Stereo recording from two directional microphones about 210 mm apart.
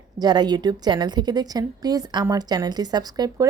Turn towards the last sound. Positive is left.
turn(degrees=-20)  # may be behind; listen again after turning